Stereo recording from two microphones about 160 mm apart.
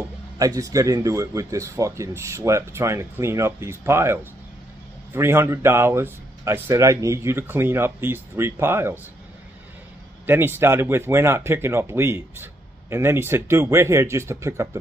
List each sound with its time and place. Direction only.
0.4 s speech: 20° right (ahead or behind)
10.2 s speech: 15° right (ahead or behind)